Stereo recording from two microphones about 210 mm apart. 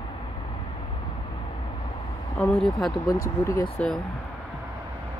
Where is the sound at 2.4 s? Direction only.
5° left (ahead or behind).